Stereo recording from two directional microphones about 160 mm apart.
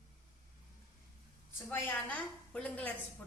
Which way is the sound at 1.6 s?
10° left (ahead or behind).